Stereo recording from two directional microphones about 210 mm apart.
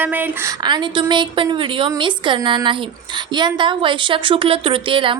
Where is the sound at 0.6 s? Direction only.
20° right (ahead or behind).